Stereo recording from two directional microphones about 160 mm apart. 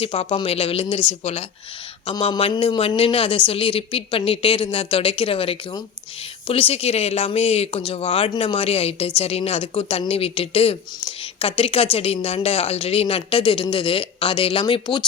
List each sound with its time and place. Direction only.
0.0 s speech: 35° left (ahead or behind)